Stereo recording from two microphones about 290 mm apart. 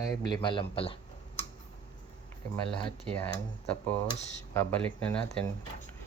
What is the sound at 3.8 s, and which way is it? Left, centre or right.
Speech, centre.